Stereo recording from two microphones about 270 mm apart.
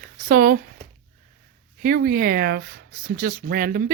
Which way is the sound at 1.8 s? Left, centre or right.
Right.